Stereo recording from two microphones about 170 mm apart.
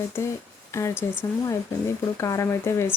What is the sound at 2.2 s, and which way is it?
Speech, 15° left (ahead or behind).